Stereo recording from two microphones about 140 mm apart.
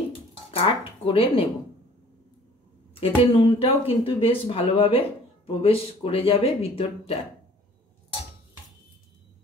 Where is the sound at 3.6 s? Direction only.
40° left (ahead or behind).